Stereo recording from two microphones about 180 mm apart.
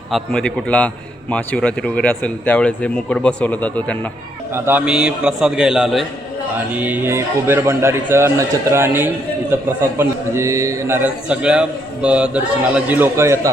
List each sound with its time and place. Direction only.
0.1 s a man's voice: 5° left (ahead or behind)
4.5 s a man's voice: 10° right (ahead or behind)